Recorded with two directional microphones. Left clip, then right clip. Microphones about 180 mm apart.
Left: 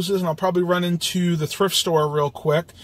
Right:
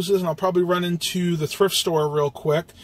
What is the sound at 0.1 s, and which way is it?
Speech, 5° left (ahead or behind).